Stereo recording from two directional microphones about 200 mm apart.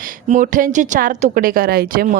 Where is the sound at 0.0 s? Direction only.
40° right (ahead or behind).